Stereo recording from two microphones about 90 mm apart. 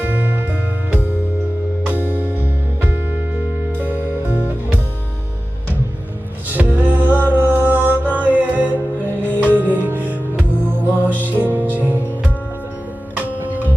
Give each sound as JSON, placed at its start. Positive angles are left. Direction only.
{"t": 0.0, "sound": "music", "side_deg": -20}
{"t": 6.5, "sound": "music", "side_deg": -20}